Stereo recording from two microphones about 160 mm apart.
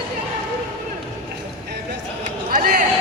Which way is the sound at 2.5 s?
60° right (ahead or behind).